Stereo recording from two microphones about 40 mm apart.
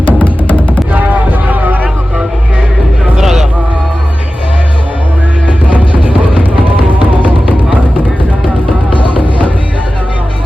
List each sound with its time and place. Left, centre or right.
0.2 s music: left
0.9 s vehicle: right
3.2 s music: centre